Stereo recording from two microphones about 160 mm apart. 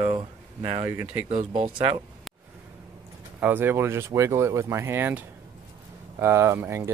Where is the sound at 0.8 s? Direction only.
10° right (ahead or behind).